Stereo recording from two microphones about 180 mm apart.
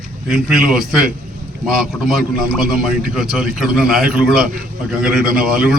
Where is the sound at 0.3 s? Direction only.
5° right (ahead or behind).